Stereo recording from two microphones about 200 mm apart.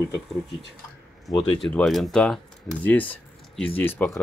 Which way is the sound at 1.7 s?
Centre (ahead or behind).